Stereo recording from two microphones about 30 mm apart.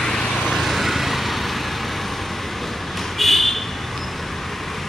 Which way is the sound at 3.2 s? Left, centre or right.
Centre.